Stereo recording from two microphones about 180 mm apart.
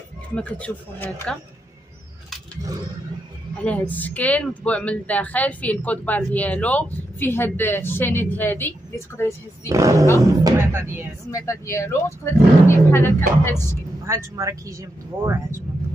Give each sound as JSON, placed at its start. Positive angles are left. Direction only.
{"t": 0.4, "sound": "speech", "side_deg": 10}
{"t": 3.6, "sound": "speech", "side_deg": 10}
{"t": 9.7, "sound": "speech", "side_deg": -20}
{"t": 11.2, "sound": "speech", "side_deg": 15}
{"t": 14.0, "sound": "speech", "side_deg": -15}